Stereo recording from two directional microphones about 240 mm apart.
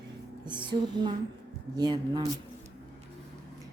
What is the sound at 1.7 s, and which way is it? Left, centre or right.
Speech, centre.